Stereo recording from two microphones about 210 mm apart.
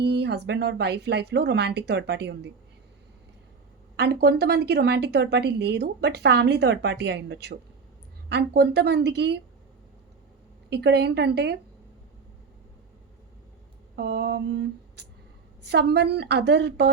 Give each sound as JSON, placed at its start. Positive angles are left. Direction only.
{"t": 0.0, "sound": "a woman's voice", "side_deg": -50}
{"t": 3.9, "sound": "a woman's voice", "side_deg": -50}
{"t": 10.7, "sound": "a woman's voice", "side_deg": -50}
{"t": 13.9, "sound": "a sound", "side_deg": -50}
{"t": 15.6, "sound": "a woman's voice", "side_deg": -55}